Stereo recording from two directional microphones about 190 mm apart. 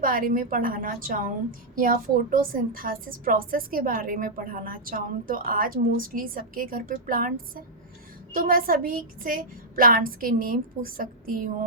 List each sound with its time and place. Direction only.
0.0 s a woman's voice: 45° right (ahead or behind)